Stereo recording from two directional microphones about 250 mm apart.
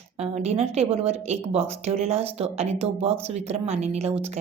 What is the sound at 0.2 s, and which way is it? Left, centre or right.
A woman's voice, right.